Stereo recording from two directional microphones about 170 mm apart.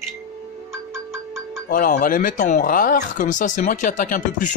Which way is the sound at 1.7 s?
55° left (ahead or behind).